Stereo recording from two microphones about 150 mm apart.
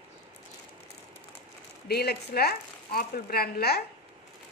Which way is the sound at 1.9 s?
90° left.